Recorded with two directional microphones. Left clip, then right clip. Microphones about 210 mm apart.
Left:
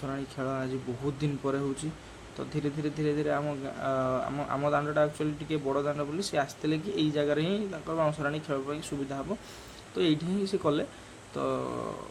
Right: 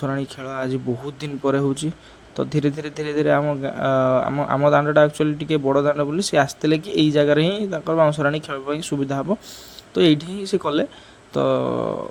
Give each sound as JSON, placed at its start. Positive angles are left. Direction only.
{"t": 0.0, "sound": "a man's voice", "side_deg": -35}